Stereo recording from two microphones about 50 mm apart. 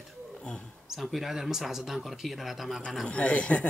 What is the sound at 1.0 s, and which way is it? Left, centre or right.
Speech, centre.